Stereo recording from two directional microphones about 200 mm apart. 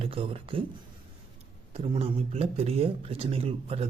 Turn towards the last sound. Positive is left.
turn(degrees=-30)  # may be behind; listen again after turning